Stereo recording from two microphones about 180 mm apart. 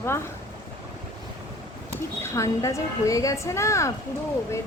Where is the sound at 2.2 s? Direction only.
15° left (ahead or behind).